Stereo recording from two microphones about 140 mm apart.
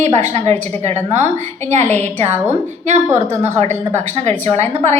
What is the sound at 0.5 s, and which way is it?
Speech, 15° left (ahead or behind).